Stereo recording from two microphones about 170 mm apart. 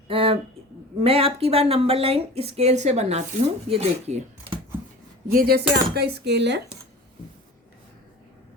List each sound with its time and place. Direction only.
0.1 s a sound: 30° right (ahead or behind)
1.0 s speech: 35° right (ahead or behind)
5.3 s cutlery: 60° right (ahead or behind)
5.7 s speech: 70° right (ahead or behind)